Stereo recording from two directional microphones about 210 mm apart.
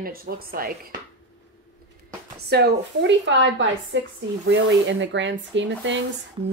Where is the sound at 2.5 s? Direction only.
55° right (ahead or behind).